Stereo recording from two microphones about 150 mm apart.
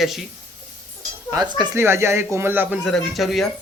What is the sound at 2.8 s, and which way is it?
Speech, centre (ahead or behind).